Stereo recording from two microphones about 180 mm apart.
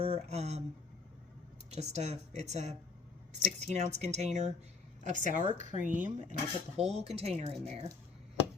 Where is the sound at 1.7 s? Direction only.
35° right (ahead or behind).